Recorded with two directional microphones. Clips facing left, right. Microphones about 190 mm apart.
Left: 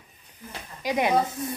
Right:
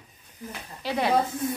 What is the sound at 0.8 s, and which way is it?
Speech, 15° left (ahead or behind).